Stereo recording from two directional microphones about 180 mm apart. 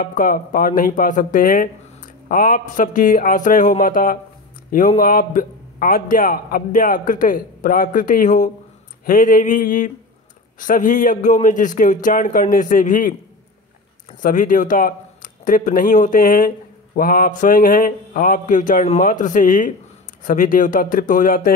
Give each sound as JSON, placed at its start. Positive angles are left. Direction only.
{"t": 0.0, "sound": "speech", "side_deg": 50}
{"t": 14.2, "sound": "speech", "side_deg": 45}